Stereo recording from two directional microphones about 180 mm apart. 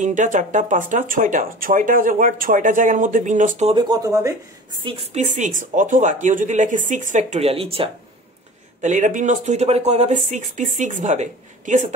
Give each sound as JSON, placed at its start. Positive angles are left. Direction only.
{"t": 0.0, "sound": "speech", "side_deg": -45}
{"t": 3.7, "sound": "speech", "side_deg": -20}
{"t": 4.8, "sound": "speech", "side_deg": -40}
{"t": 8.8, "sound": "speech", "side_deg": -45}